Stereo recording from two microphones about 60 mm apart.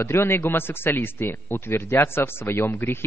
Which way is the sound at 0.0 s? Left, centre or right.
Left.